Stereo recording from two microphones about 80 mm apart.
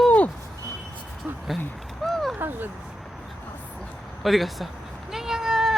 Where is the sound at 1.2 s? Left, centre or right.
Centre.